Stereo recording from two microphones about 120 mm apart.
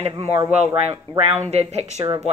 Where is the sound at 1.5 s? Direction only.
65° right (ahead or behind).